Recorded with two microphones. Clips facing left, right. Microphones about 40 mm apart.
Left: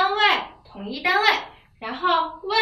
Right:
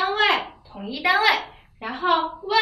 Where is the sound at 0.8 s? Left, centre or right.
Centre.